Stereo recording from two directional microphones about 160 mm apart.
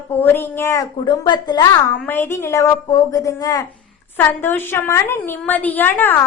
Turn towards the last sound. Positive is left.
turn(degrees=10)  # may be behind; listen again after turning